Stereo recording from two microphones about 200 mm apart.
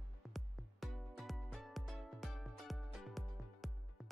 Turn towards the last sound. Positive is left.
turn(degrees=0)  # may be behind; listen again after turning